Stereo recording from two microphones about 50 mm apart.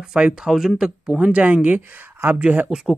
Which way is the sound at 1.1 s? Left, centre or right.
Right.